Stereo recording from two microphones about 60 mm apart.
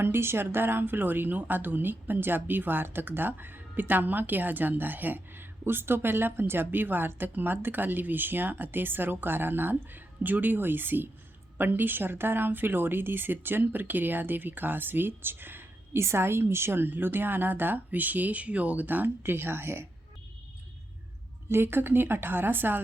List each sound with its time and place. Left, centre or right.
0.0 s speech: right
21.5 s speech: right